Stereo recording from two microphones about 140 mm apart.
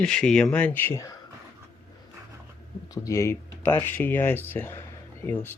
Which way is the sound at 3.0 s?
20° left (ahead or behind).